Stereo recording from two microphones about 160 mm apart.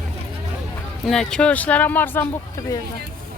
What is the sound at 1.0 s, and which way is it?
Speech, 5° left (ahead or behind).